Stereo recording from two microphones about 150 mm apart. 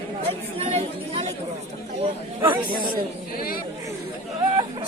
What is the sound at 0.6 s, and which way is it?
Chatter, 45° right (ahead or behind).